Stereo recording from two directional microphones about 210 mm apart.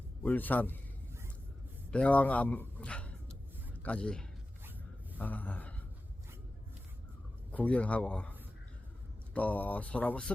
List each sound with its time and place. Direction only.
0.2 s speech: 10° left (ahead or behind)
1.9 s a man's voice: 5° left (ahead or behind)
7.5 s speech: 5° left (ahead or behind)